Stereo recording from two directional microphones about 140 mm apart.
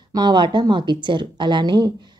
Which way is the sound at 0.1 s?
30° right (ahead or behind).